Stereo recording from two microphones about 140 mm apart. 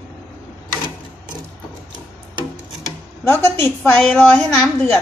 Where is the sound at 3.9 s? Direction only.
5° left (ahead or behind).